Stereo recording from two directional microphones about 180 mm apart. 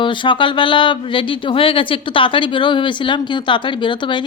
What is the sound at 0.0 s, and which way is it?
Speech, 25° left (ahead or behind).